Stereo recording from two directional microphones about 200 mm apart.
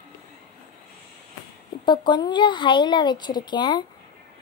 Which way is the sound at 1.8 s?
20° left (ahead or behind).